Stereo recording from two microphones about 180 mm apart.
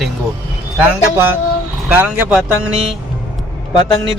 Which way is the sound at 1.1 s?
10° right (ahead or behind).